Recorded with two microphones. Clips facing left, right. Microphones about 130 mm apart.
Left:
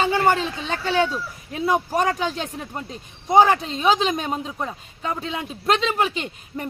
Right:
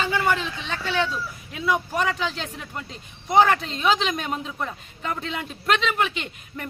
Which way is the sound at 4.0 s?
30° left (ahead or behind).